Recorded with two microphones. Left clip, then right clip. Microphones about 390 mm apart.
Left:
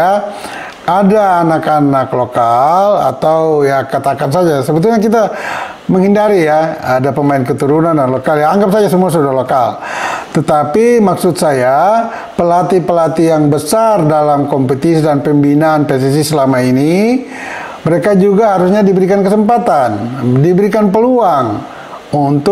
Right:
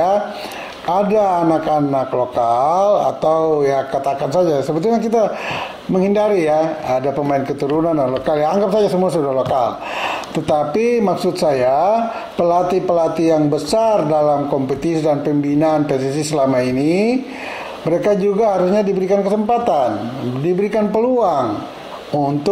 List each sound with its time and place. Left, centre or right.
0.8 s speech: left